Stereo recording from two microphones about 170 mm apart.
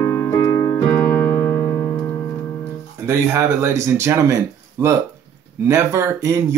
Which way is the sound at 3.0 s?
15° right (ahead or behind).